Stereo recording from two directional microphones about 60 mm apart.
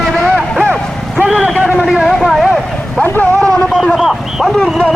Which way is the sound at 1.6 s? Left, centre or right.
Centre.